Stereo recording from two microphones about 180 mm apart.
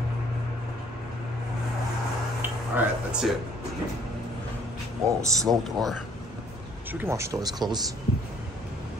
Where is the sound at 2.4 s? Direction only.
10° right (ahead or behind).